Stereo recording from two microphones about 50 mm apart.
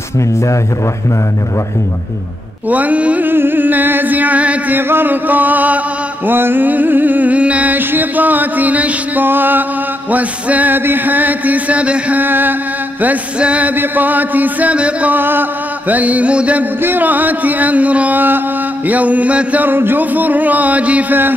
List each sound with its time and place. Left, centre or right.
2.7 s music: right
3.3 s music: right
4.7 s music: right
6.2 s a sound: right
7.7 s music: right
9.2 s music: right
12.2 s music: right
13.4 s music: right
15.1 s a sound: right
15.9 s mantra: right
16.8 s music: right
19.7 s music: right